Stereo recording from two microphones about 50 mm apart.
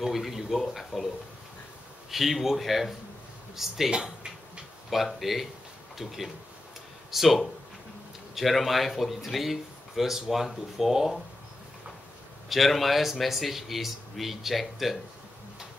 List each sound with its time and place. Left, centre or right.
0.0 s speech: centre
3.9 s speech: centre
4.8 s speech: centre
12.4 s speech: centre